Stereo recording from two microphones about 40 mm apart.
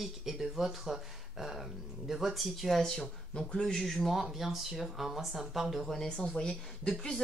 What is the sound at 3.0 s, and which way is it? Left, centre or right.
Speech, left.